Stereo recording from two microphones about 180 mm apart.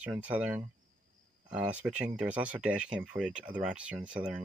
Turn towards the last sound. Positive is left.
turn(degrees=-5)  # may be behind; listen again after turning